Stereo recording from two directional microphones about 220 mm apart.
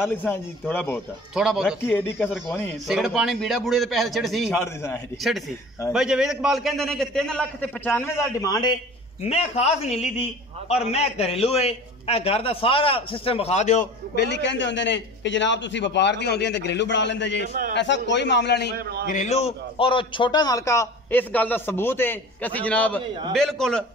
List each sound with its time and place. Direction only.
0.0 s a man's voice: 10° left (ahead or behind)
1.3 s a man's voice: 5° right (ahead or behind)
1.9 s a man's voice: 10° left (ahead or behind)
2.9 s a man's voice: centre (ahead or behind)
5.9 s a man's voice: 5° right (ahead or behind); by 8.7 s 20° left (ahead or behind)
9.2 s a man's voice: 30° left (ahead or behind)
14.1 s a man's voice: 50° left (ahead or behind)
18.8 s a man's voice: 45° right (ahead or behind)
19.0 s a man's voice: 30° left (ahead or behind); by 23.8 s centre (ahead or behind)